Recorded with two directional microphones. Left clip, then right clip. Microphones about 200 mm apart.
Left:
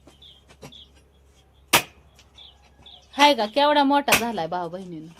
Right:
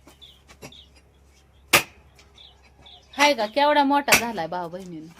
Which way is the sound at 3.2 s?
35° left (ahead or behind).